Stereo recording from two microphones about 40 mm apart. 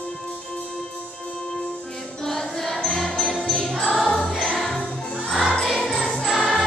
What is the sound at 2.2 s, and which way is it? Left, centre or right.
Music, centre.